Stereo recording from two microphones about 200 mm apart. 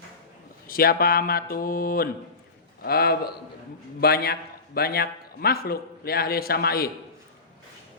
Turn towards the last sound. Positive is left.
turn(degrees=50)  # may be behind; listen again after turning